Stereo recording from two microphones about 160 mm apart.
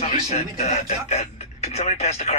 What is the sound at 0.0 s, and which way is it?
Speech, 40° left (ahead or behind).